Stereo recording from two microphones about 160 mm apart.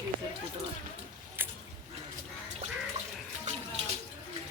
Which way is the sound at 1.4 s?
15° right (ahead or behind).